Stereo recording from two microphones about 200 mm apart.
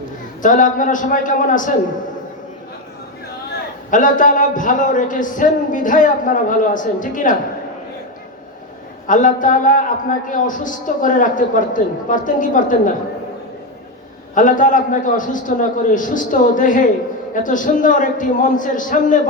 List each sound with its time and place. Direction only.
0.4 s a man's voice: 40° left (ahead or behind)
3.9 s a man's voice: 40° left (ahead or behind)
9.0 s a man's voice: 40° left (ahead or behind)
14.3 s a man's voice: 40° left (ahead or behind)